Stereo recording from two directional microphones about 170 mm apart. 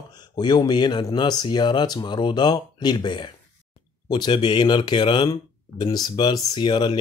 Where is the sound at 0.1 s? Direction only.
25° left (ahead or behind).